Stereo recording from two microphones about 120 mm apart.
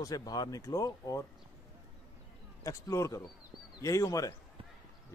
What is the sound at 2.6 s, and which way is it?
Speech, 25° left (ahead or behind).